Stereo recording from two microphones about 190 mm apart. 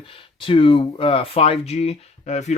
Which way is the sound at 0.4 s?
25° left (ahead or behind).